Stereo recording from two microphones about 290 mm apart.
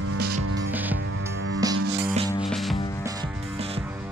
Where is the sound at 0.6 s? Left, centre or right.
Centre.